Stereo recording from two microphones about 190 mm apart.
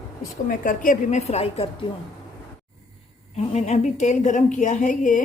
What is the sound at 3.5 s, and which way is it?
A woman's voice, 40° left (ahead or behind).